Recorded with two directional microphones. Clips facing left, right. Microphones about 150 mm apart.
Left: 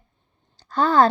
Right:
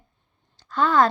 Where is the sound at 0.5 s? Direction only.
35° left (ahead or behind).